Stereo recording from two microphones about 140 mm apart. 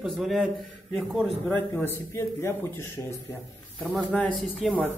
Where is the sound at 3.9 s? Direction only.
Centre (ahead or behind).